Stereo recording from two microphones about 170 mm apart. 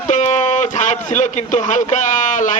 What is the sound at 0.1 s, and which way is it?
A man's voice, 45° left (ahead or behind).